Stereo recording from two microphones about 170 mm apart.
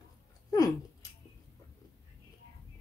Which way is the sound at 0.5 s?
20° left (ahead or behind).